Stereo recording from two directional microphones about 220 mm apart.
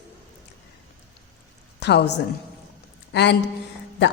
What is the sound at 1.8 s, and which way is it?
Speech, 50° left (ahead or behind).